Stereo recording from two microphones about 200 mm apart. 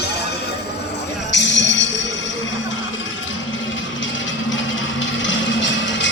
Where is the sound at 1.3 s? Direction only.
60° left (ahead or behind).